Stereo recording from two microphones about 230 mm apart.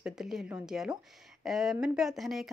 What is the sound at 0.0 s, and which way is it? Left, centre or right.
Speech, centre.